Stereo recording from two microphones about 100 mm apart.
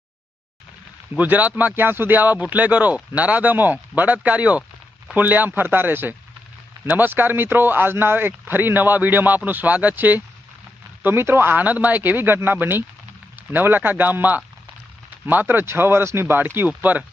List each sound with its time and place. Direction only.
1.1 s speech: 15° right (ahead or behind)